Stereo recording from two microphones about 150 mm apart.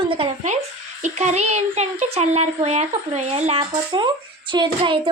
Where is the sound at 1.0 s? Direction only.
50° right (ahead or behind).